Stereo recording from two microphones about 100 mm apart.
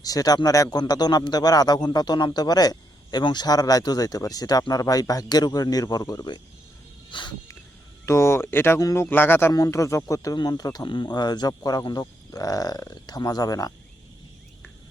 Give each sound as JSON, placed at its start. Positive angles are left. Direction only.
{"t": 0.0, "sound": "a man's voice", "side_deg": 40}
{"t": 7.1, "sound": "a sound", "side_deg": 55}
{"t": 8.0, "sound": "speech", "side_deg": 25}
{"t": 8.8, "sound": "a man's voice", "side_deg": 35}
{"t": 9.0, "sound": "speech", "side_deg": 20}
{"t": 9.5, "sound": "a man's voice", "side_deg": 35}